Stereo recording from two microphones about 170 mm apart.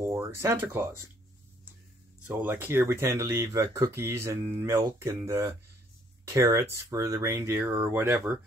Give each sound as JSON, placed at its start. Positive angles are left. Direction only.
{"t": 0.0, "sound": "speech", "side_deg": -15}
{"t": 2.2, "sound": "speech", "side_deg": -10}